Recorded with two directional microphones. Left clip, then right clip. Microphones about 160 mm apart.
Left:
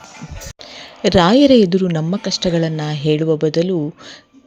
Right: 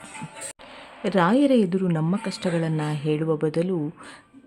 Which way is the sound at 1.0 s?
30° left (ahead or behind).